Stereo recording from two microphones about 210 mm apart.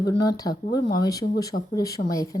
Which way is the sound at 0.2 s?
20° left (ahead or behind).